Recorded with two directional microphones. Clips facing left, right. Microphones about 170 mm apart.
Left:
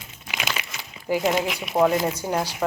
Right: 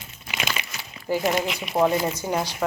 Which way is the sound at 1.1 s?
15° left (ahead or behind).